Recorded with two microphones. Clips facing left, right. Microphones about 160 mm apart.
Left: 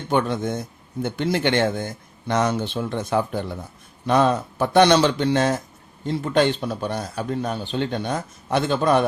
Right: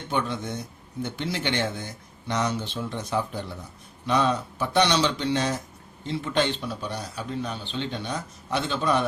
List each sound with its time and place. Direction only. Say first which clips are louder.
0.1 s a man's voice: left 7 dB; 50° left (ahead or behind)